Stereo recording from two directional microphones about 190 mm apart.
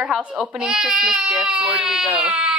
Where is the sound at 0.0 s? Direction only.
5° right (ahead or behind).